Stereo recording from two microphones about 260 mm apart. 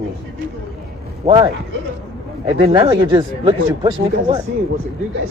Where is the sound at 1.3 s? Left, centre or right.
Centre.